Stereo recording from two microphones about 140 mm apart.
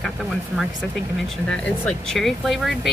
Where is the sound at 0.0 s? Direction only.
Centre (ahead or behind).